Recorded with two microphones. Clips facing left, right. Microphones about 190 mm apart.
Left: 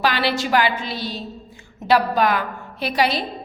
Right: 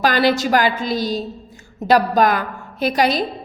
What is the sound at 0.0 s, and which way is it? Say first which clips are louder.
A woman's voice: right 5 dB; 45° right (ahead or behind).